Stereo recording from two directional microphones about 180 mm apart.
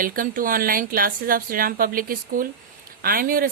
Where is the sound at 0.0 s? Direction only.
50° right (ahead or behind).